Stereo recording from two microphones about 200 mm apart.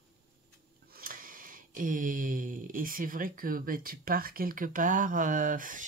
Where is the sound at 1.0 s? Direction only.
45° right (ahead or behind).